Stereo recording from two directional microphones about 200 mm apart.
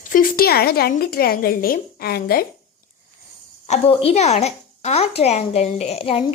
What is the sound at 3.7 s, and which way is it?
A woman's voice, 30° left (ahead or behind).